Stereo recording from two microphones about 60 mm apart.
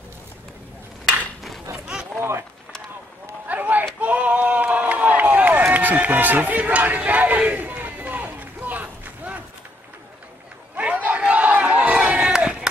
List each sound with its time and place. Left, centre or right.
3.4 s run: right
4.0 s a sound: right
10.8 s crowd: right